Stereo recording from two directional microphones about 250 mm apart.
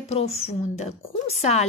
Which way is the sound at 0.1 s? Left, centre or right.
Left.